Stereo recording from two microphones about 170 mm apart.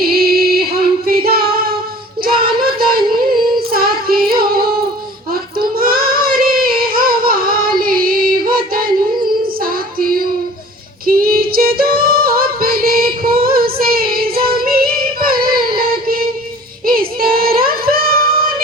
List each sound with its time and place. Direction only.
0.0 s female singing: 60° right (ahead or behind)
2.2 s child singing: 60° right (ahead or behind)
3.6 s female singing: 60° right (ahead or behind)
5.3 s child singing: 60° right (ahead or behind)
11.0 s female singing: 60° right (ahead or behind)
16.8 s child singing: 60° right (ahead or behind)